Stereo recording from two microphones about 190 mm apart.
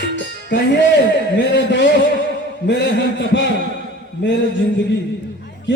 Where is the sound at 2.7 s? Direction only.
65° left (ahead or behind).